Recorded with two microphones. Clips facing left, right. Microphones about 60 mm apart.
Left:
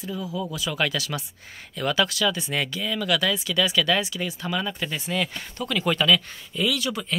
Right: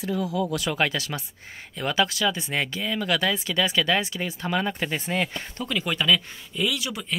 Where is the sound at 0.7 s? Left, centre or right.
Right.